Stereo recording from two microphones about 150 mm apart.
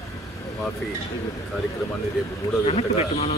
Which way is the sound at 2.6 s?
45° left (ahead or behind).